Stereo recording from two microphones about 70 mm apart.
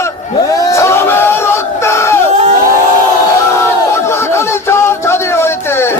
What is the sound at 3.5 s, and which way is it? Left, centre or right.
Crowd, left.